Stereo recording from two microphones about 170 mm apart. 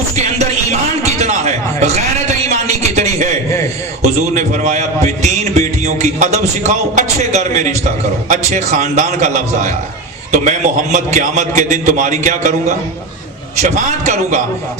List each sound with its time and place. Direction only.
0.2 s music: 40° right (ahead or behind)
1.2 s a sound: 45° right (ahead or behind)
4.0 s a man's voice: 45° right (ahead or behind)